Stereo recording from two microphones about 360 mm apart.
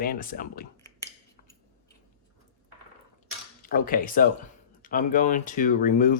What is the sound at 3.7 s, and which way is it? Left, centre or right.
Speech, left.